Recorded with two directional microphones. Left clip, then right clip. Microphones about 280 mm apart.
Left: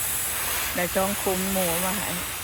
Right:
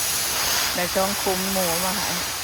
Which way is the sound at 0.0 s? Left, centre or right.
Right.